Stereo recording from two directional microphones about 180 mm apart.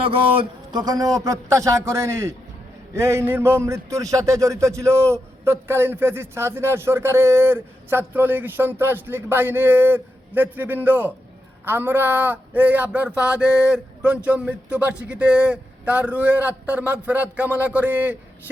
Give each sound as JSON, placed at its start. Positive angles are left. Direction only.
{"t": 0.7, "sound": "a man's voice", "side_deg": -20}